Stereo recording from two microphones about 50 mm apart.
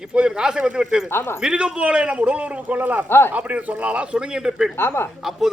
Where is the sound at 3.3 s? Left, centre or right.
Right; by 4.7 s centre.